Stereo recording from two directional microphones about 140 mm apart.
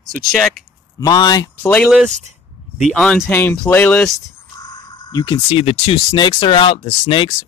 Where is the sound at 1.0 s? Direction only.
30° left (ahead or behind).